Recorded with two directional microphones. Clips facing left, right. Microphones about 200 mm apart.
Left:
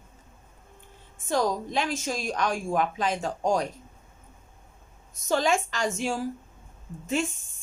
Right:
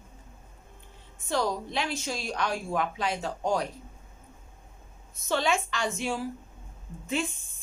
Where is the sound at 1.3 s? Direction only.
45° left (ahead or behind).